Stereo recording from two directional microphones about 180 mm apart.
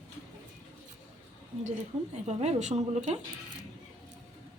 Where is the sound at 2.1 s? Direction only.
40° right (ahead or behind).